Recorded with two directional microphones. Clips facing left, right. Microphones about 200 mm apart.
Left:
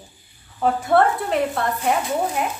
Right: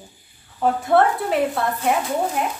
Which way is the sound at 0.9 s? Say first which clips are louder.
Right 1 dB; centre (ahead or behind).